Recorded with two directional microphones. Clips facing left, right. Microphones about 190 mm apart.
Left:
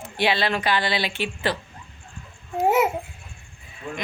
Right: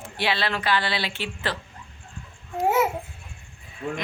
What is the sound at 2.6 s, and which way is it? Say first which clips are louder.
Babbling: left 2 dB; 20° left (ahead or behind).